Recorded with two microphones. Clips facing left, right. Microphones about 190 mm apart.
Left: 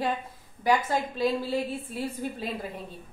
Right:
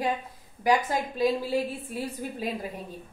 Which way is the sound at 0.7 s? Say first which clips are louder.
Even; 15° right (ahead or behind).